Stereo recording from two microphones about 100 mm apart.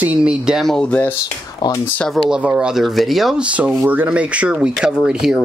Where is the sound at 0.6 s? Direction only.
10° left (ahead or behind).